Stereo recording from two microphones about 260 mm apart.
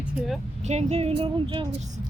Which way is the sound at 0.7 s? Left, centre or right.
Right.